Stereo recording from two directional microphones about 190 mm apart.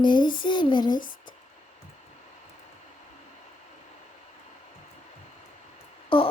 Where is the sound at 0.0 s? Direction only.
25° left (ahead or behind).